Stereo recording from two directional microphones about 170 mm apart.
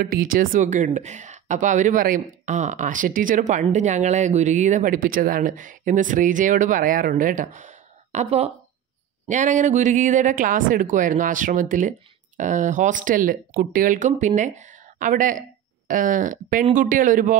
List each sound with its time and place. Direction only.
0.0 s speech: 55° right (ahead or behind)